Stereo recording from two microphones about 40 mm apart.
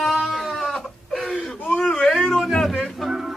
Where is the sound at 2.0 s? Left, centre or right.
Centre.